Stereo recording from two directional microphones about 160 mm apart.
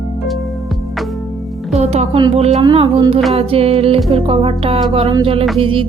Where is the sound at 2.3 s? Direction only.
40° right (ahead or behind).